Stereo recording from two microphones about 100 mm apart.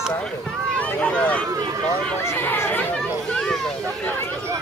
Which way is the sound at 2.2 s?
20° left (ahead or behind).